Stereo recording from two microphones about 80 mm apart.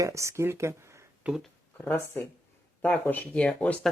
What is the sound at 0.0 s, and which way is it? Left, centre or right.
Speech, right.